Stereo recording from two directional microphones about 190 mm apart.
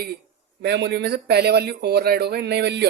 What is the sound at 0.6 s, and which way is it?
Speech, 60° right (ahead or behind).